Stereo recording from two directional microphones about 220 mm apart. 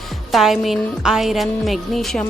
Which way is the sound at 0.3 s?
Centre (ahead or behind).